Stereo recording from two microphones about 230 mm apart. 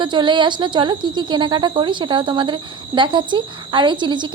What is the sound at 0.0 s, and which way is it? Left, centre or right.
A woman's voice, centre.